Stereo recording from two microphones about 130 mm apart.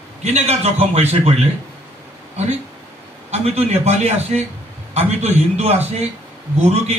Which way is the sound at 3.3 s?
55° right (ahead or behind).